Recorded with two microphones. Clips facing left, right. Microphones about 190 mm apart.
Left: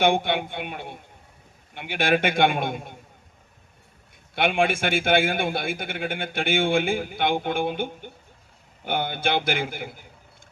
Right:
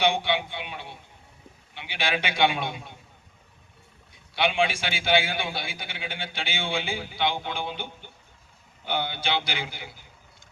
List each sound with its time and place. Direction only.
0.0 s a man's voice: 50° left (ahead or behind)
4.1 s a man's voice: 50° left (ahead or behind)